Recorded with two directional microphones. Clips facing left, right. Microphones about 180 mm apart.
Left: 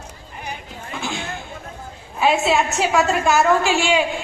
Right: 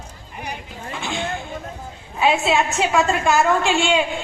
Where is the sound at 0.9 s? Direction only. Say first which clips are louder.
Even; centre (ahead or behind).